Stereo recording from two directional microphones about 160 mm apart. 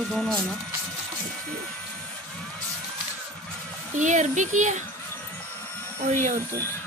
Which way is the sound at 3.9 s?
50° right (ahead or behind).